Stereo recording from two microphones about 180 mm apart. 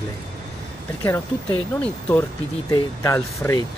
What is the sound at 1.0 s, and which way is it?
Speech, 15° left (ahead or behind).